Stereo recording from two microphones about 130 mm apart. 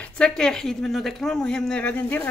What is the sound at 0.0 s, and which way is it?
Speech, 5° left (ahead or behind).